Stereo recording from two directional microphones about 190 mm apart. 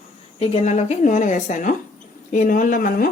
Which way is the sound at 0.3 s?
30° left (ahead or behind).